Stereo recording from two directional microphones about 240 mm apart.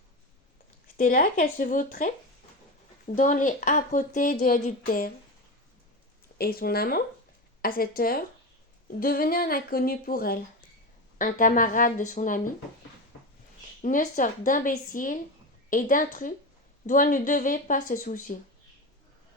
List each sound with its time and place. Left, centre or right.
0.9 s speech: left
3.2 s speech: left
6.4 s speech: left
13.8 s speech: left